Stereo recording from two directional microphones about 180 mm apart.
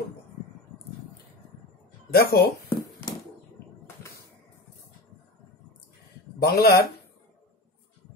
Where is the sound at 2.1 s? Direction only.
55° left (ahead or behind).